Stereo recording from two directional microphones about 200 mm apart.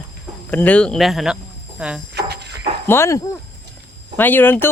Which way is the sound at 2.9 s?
15° left (ahead or behind).